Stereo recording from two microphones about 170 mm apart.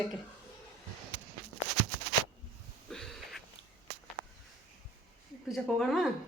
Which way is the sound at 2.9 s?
Centre (ahead or behind).